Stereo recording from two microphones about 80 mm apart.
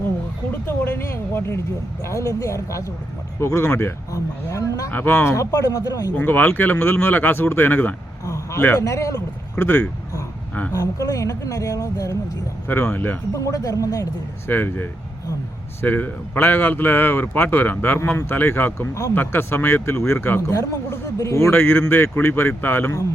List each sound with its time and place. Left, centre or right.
0.7 s speech: left
4.9 s speech: left
6.1 s speech: left
8.2 s a sound: left
8.8 s speech: left
9.6 s speech: left
10.7 s speech: left
12.8 s speech: left
13.3 s speech: left
14.4 s speech: left